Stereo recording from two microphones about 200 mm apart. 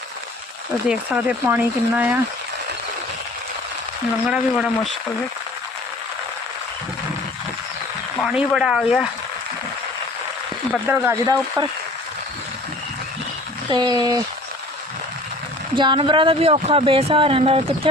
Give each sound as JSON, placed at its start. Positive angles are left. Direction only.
{"t": 0.9, "sound": "speech", "side_deg": -5}
{"t": 4.3, "sound": "speech", "side_deg": 0}
{"t": 8.2, "sound": "speech", "side_deg": -5}
{"t": 10.8, "sound": "speech", "side_deg": -10}
{"t": 13.7, "sound": "speech", "side_deg": -20}
{"t": 15.7, "sound": "speech", "side_deg": -25}